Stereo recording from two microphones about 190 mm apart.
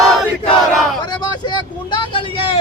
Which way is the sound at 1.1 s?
25° left (ahead or behind).